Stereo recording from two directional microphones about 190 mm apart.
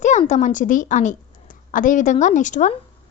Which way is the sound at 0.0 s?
40° left (ahead or behind).